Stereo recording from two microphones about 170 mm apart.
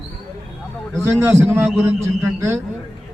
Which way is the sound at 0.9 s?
15° right (ahead or behind).